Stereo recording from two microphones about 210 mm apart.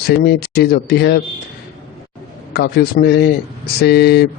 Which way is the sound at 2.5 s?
50° left (ahead or behind).